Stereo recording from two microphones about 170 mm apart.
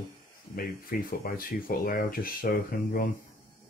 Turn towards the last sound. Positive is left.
turn(degrees=60)  # may be behind; listen again after turning